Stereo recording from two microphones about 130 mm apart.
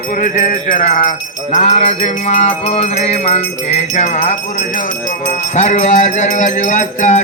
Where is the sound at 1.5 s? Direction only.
55° left (ahead or behind).